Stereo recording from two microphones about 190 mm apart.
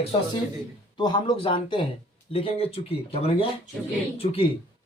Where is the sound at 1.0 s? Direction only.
25° left (ahead or behind).